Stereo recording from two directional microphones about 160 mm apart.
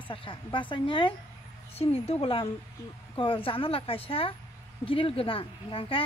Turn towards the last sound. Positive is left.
turn(degrees=35)  # may be behind; listen again after turning